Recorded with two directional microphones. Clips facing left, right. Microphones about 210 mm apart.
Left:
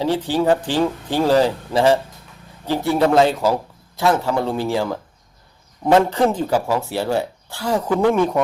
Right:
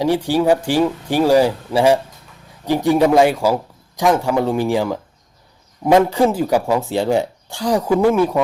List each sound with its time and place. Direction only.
0.0 s a man's voice: 15° right (ahead or behind)